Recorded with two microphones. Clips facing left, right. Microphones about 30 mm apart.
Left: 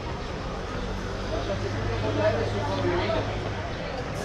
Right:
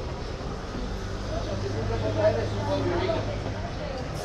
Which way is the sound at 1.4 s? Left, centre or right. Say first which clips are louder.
Left 1 dB; left.